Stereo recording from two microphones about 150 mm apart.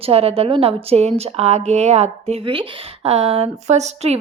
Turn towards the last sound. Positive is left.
turn(degrees=-45)  # may be behind; listen again after turning